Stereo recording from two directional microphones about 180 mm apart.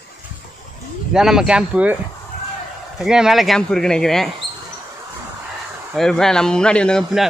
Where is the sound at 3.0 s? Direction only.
5° right (ahead or behind).